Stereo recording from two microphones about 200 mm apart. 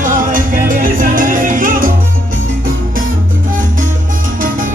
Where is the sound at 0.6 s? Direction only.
45° right (ahead or behind).